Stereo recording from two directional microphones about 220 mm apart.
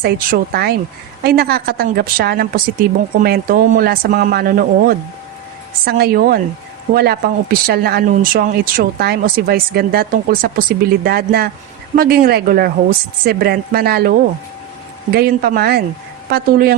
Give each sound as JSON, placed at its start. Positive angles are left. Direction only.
{"t": 0.0, "sound": "speech", "side_deg": -45}